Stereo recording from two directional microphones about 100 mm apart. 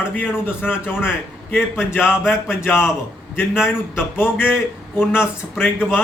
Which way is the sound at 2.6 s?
20° left (ahead or behind).